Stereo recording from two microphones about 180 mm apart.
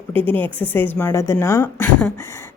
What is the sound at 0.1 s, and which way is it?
Speech, 10° left (ahead or behind).